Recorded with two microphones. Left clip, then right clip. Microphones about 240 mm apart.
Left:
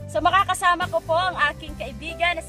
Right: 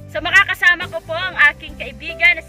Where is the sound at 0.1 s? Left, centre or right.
Centre.